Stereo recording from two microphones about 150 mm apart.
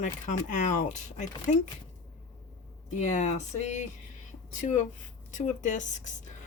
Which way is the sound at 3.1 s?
50° left (ahead or behind).